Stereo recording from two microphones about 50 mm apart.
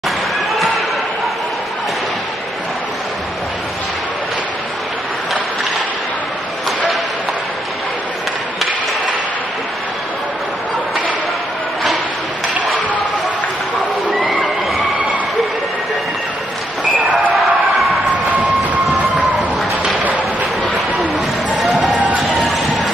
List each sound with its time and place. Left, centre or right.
17.4 s crowd: centre
18.1 s train: right
21.6 s music: centre
21.9 s music: right